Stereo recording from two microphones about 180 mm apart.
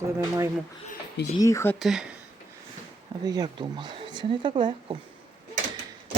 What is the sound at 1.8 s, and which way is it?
Speech, centre (ahead or behind).